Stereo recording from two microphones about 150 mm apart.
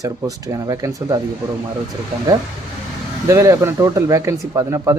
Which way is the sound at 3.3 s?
20° right (ahead or behind).